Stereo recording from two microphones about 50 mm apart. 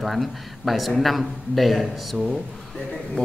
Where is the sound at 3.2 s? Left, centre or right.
Left.